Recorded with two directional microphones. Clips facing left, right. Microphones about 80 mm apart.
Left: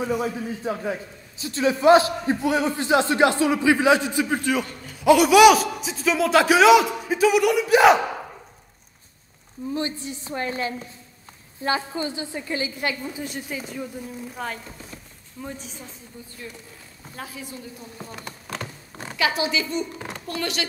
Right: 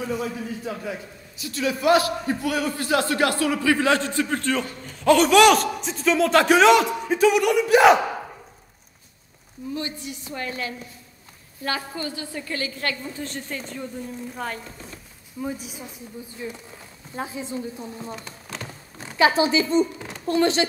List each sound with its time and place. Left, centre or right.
0.0 s a man's voice: centre
0.7 s a woman's voice: left; by 8.0 s centre
9.8 s a woman's voice: left; by 16.3 s centre
17.1 s speech: right
17.8 s a woman's voice: right
18.2 s a sound: left
19.1 s a woman's voice: right